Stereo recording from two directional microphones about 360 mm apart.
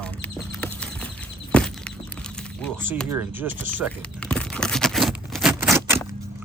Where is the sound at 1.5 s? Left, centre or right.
Centre.